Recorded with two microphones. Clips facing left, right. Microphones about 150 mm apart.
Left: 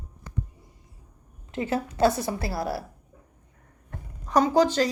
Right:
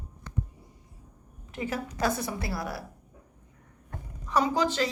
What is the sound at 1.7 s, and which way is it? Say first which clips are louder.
A woman's voice: left 7 dB; 30° left (ahead or behind).